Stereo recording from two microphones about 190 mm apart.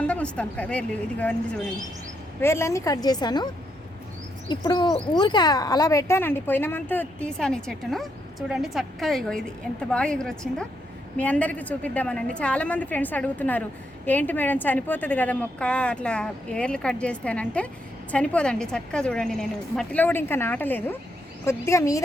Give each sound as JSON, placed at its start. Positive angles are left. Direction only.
{"t": 0.1, "sound": "a woman's voice", "side_deg": 5}
{"t": 2.4, "sound": "a woman's voice", "side_deg": 15}